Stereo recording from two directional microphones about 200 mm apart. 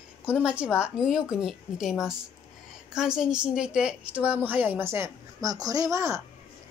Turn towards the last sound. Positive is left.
turn(degrees=-15)  # may be behind; listen again after turning